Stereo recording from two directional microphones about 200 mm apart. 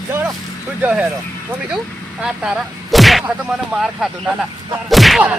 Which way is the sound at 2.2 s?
5° right (ahead or behind).